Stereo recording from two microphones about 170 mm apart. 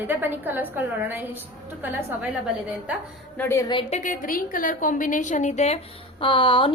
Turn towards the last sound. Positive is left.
turn(degrees=30)  # may be behind; listen again after turning